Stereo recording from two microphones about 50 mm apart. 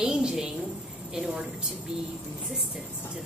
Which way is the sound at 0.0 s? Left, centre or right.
Centre.